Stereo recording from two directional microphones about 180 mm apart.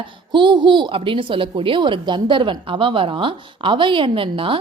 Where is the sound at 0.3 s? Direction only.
25° right (ahead or behind).